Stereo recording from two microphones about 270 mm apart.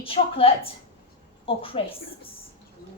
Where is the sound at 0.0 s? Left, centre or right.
Centre.